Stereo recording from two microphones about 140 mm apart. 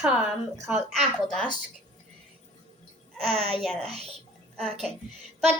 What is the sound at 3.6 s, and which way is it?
A child's voice, 5° left (ahead or behind).